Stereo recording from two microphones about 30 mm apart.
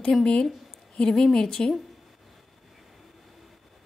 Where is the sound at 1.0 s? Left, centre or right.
Left.